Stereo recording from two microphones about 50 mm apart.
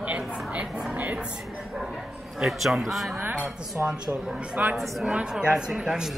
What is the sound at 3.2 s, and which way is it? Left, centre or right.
Speech, right.